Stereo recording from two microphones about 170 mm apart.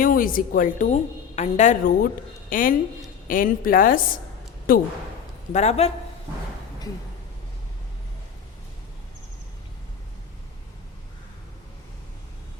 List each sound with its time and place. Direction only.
0.0 s a woman's voice: 55° left (ahead or behind)
5.5 s a man's voice: 40° left (ahead or behind)